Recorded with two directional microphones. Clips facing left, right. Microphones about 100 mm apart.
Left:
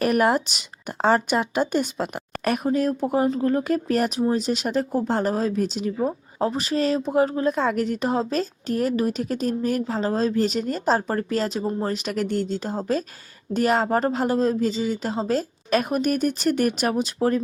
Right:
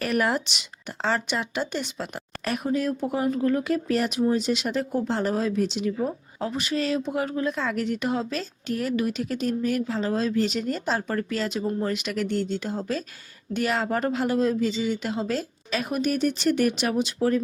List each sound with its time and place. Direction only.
0.0 s speech: 45° left (ahead or behind)
2.6 s speech: 40° left (ahead or behind)